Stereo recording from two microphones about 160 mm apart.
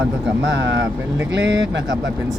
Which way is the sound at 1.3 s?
90° right.